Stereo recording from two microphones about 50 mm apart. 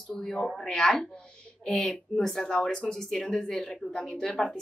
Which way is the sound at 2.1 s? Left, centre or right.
Centre.